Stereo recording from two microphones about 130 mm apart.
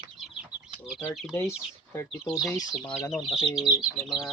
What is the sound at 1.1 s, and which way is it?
Speech, centre (ahead or behind).